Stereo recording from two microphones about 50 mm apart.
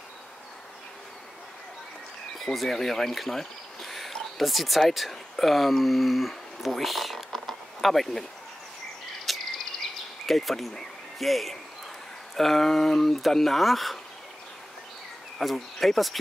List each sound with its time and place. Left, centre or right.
2.3 s speech: centre
9.3 s cricket: centre
10.2 s speech: centre
15.3 s speech: centre